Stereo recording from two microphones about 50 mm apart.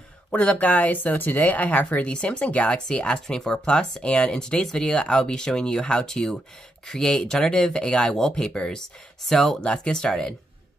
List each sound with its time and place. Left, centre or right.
0.3 s speech: left; by 9.6 s centre
9.6 s speech: centre